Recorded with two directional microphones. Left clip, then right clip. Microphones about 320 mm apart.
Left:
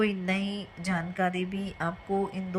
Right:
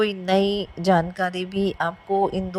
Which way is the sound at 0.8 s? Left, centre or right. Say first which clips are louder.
Right 9 dB; centre.